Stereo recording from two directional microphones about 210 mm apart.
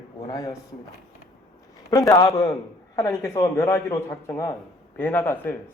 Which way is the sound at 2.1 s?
15° left (ahead or behind).